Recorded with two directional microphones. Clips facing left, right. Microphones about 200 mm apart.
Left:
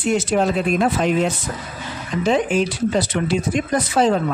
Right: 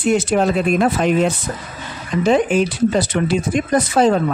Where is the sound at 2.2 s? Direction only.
55° right (ahead or behind).